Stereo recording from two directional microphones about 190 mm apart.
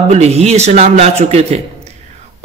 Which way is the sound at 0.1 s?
35° right (ahead or behind).